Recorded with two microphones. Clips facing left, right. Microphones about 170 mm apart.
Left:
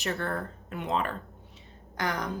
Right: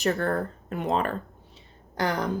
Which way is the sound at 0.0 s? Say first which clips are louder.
Right 6 dB; 40° right (ahead or behind).